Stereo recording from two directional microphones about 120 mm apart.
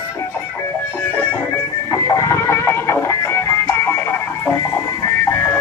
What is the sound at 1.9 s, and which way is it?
Music, 25° left (ahead or behind).